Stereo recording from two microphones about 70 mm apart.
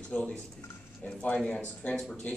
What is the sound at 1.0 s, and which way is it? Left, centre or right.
Speech, centre.